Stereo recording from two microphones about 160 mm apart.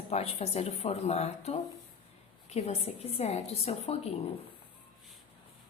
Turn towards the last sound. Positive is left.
turn(degrees=40)  # may be behind; listen again after turning